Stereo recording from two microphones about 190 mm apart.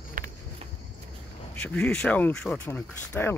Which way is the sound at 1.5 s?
5° left (ahead or behind).